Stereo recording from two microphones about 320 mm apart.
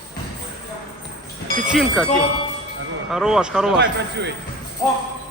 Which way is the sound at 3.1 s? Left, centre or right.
Centre.